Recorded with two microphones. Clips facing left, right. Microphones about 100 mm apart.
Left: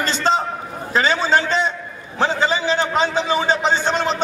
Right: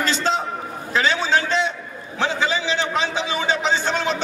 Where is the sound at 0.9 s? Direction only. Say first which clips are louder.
Left 2 dB; 40° left (ahead or behind).